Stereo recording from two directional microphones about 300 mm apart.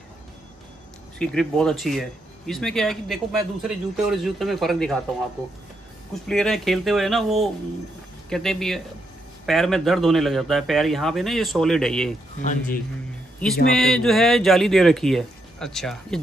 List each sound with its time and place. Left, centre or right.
1.1 s speech: centre
6.2 s speech: centre
12.4 s speech: left
13.7 s speech: centre